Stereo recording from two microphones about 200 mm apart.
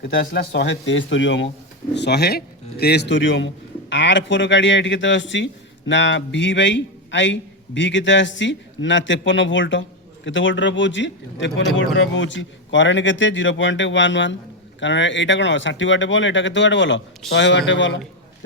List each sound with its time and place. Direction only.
0.3 s speech: 60° left (ahead or behind)
2.0 s a man's voice: 55° left (ahead or behind)